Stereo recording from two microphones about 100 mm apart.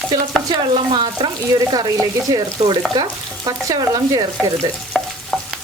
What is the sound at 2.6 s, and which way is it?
Speech, 90° right.